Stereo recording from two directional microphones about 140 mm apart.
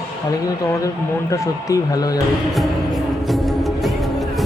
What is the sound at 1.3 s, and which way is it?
Speech, 25° left (ahead or behind).